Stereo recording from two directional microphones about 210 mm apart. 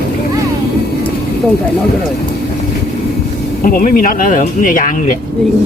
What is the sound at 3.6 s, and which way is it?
Speech, 40° left (ahead or behind).